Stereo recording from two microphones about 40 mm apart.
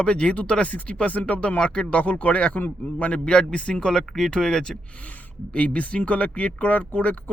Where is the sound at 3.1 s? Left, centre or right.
Left.